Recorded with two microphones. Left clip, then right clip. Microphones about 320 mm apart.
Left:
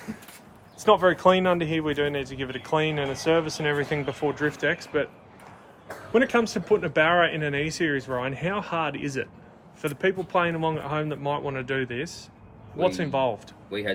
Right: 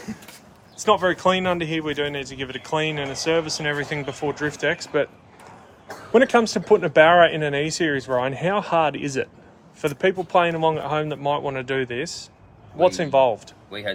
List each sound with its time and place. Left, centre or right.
0.8 s speech: centre
6.1 s speech: centre